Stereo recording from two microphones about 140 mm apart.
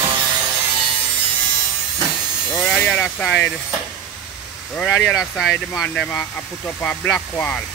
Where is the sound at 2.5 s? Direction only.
10° left (ahead or behind).